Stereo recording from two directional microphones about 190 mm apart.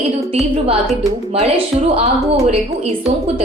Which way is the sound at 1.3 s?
30° right (ahead or behind).